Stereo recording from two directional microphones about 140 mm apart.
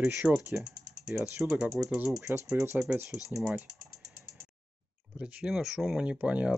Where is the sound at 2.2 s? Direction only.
20° right (ahead or behind).